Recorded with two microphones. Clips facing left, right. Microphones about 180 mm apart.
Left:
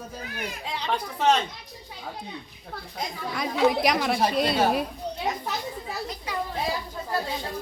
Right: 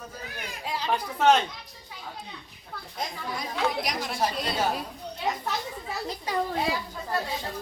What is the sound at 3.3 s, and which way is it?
Speech, 70° left (ahead or behind).